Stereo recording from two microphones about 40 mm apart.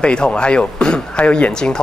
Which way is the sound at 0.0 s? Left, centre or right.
Left.